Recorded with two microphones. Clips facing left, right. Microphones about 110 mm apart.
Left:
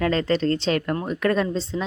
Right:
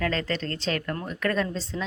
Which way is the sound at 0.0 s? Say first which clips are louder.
Left 7 dB; 30° left (ahead or behind).